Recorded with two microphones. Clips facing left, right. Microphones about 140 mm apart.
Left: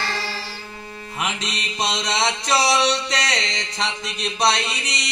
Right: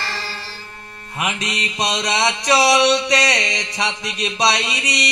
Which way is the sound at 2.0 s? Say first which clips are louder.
Right 4 dB; 70° right (ahead or behind).